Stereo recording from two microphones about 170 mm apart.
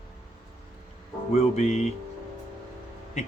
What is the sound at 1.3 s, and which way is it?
Speech, 40° left (ahead or behind).